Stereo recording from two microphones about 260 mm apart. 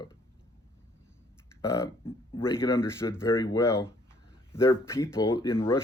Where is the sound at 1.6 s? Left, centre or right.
Centre.